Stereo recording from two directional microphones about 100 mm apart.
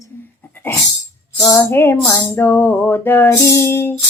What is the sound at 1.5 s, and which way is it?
Child singing, 25° left (ahead or behind).